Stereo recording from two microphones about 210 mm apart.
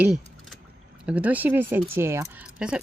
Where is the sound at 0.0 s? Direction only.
Centre (ahead or behind).